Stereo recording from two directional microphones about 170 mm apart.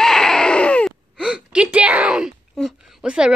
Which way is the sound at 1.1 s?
5° right (ahead or behind).